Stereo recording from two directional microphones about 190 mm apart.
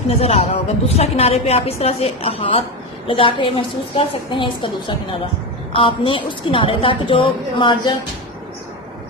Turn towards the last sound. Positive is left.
turn(degrees=25)  # may be behind; listen again after turning